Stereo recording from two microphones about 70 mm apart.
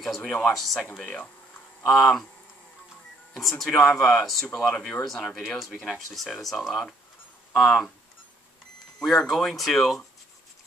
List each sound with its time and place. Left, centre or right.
0.0 s speech: centre
1.0 s speech: centre
1.9 s speech: centre
3.3 s speech: centre
9.0 s speech: centre